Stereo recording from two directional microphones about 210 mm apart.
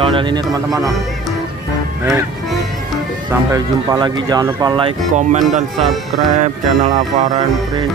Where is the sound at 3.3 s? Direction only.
15° right (ahead or behind).